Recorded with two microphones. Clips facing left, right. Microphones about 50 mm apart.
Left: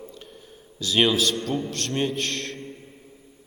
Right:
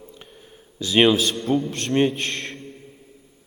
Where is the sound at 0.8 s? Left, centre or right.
Right.